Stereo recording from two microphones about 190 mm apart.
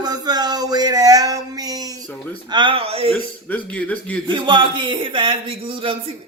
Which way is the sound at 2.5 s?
25° right (ahead or behind).